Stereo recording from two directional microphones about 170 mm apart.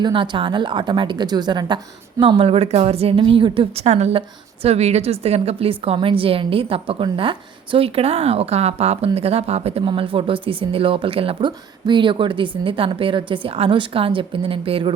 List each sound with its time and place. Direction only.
0.0 s speech: 30° right (ahead or behind)